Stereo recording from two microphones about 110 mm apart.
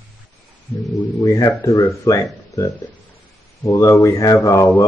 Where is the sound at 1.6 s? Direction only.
25° left (ahead or behind).